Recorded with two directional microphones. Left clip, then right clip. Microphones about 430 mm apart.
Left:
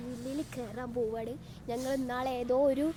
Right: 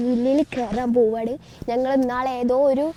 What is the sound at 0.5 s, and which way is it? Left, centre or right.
A woman's voice, right.